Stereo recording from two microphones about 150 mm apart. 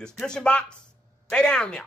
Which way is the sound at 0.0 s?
5° left (ahead or behind).